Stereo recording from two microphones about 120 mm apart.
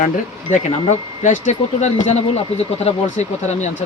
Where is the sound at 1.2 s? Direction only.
80° left.